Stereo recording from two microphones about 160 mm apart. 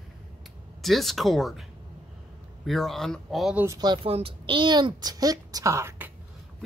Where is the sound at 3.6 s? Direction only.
25° right (ahead or behind).